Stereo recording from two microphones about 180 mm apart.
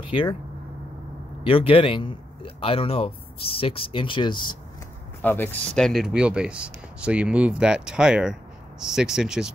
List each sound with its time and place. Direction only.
0.1 s speech: 25° left (ahead or behind)
1.4 s speech: 30° left (ahead or behind)
5.2 s speech: 10° left (ahead or behind)